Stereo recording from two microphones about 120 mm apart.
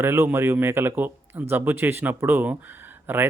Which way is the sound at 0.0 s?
20° right (ahead or behind).